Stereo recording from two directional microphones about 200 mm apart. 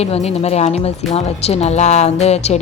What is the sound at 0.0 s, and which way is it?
A woman's voice, 30° left (ahead or behind).